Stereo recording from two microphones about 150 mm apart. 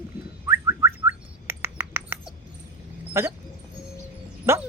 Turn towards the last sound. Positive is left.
turn(degrees=-20)  # may be behind; listen again after turning